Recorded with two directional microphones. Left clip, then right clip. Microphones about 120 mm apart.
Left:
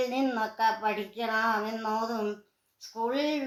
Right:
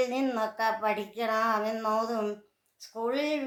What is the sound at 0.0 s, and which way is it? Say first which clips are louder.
A woman's voice: even; 40° right (ahead or behind).